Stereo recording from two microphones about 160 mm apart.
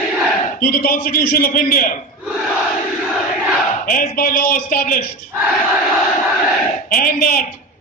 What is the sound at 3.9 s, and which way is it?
A man's voice, 65° left (ahead or behind).